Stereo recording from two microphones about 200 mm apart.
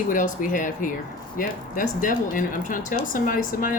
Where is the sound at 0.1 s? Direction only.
40° left (ahead or behind).